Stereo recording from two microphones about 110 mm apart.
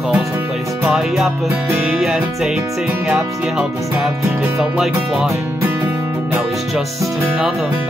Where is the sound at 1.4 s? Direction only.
20° right (ahead or behind).